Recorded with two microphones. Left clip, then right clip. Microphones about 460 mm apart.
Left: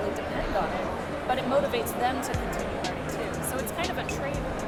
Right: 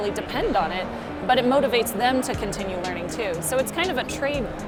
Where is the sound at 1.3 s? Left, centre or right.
Right.